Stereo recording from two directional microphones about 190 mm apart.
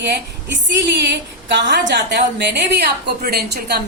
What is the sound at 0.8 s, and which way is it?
A woman's voice, 65° right (ahead or behind).